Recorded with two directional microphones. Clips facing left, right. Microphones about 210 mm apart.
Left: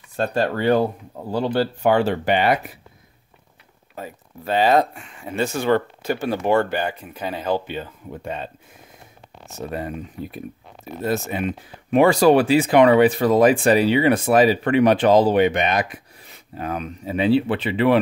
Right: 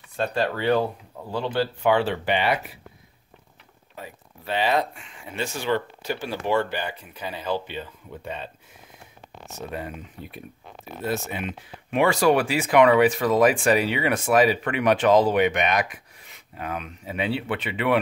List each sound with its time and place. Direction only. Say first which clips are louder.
0.1 s speech: left 3 dB; 45° left (ahead or behind)
3.9 s speech: left 6 dB; 45° left (ahead or behind)
11.1 s speech: left 5 dB; 40° left (ahead or behind)